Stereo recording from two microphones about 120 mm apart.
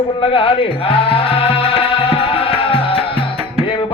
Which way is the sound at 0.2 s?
50° left (ahead or behind).